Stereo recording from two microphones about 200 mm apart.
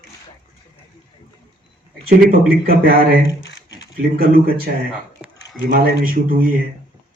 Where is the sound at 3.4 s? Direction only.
65° left (ahead or behind).